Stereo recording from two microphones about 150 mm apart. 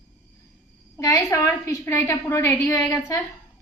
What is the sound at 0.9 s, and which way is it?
A woman's voice, 20° left (ahead or behind).